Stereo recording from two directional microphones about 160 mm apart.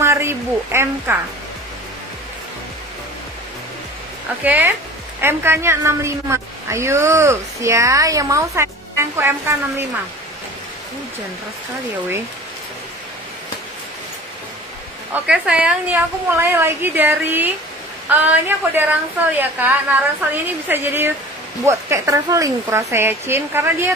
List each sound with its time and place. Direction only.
0.0 s a sound: 15° right (ahead or behind)
4.4 s a woman's voice: 10° right (ahead or behind)
15.1 s a woman's voice: 5° right (ahead or behind)